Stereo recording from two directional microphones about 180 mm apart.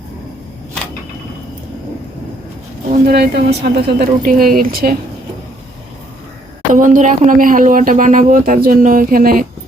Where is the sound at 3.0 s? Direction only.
65° right (ahead or behind).